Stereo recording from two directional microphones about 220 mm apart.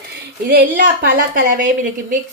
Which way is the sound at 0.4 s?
40° right (ahead or behind).